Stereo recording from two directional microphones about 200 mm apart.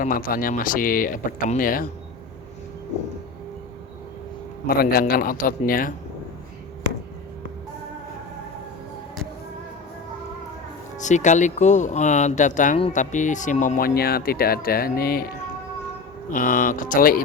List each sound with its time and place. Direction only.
0.0 s speech: 45° left (ahead or behind)
4.6 s speech: 50° left (ahead or behind)
11.0 s speech: 35° left (ahead or behind)
16.3 s speech: 45° left (ahead or behind)